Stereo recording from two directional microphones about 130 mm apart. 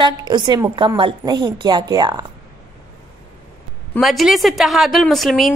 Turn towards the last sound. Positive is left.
turn(degrees=0)  # may be behind; listen again after turning